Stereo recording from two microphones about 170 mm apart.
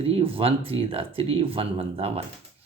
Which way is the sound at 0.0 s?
35° right (ahead or behind).